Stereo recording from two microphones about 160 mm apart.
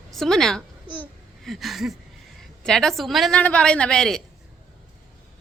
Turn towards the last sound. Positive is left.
turn(degrees=5)  # may be behind; listen again after turning